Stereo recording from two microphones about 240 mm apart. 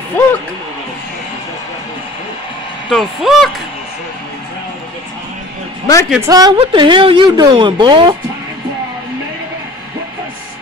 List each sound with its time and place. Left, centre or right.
0.2 s speech: centre
2.9 s speech: centre
6.0 s speech: centre
6.3 s a woman's voice: centre